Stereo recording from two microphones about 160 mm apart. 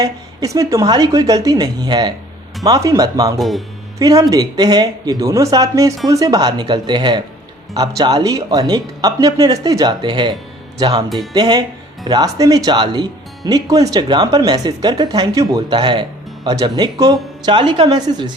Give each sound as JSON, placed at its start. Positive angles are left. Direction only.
{"t": 0.0, "sound": "speech", "side_deg": -25}
{"t": 3.3, "sound": "speech", "side_deg": 0}
{"t": 3.9, "sound": "speech", "side_deg": -20}